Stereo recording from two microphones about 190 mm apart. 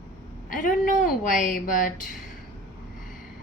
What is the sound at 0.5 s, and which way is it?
Speech, 45° left (ahead or behind).